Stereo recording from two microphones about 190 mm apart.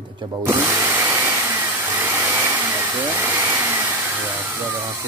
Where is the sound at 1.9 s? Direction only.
10° right (ahead or behind).